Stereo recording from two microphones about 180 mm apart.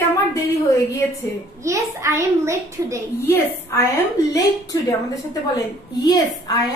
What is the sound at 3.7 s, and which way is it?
A woman's voice, 15° left (ahead or behind).